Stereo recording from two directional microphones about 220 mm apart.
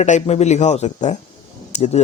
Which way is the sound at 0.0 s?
30° left (ahead or behind).